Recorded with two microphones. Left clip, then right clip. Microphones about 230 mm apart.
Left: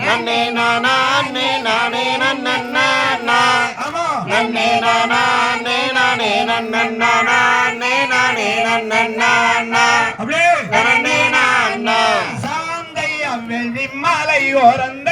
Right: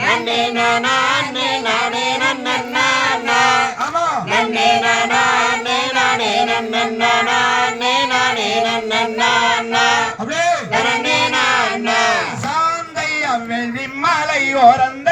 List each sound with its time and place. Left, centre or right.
0.1 s music: centre
4.8 s mantra: centre
10.3 s a sound: left
10.8 s music: centre
14.0 s music: left